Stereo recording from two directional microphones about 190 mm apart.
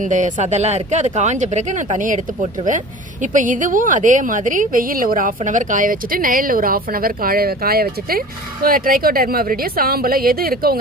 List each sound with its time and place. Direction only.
0.0 s a woman's voice: 40° right (ahead or behind)